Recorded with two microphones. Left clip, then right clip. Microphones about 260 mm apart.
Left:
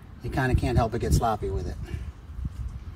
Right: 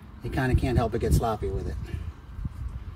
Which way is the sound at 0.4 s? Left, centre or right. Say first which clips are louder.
Left 1 dB; centre.